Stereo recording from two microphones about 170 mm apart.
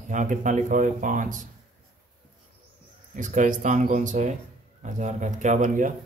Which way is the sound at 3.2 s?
50° right (ahead or behind).